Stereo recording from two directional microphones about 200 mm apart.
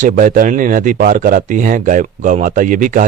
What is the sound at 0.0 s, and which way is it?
Speech, 40° right (ahead or behind).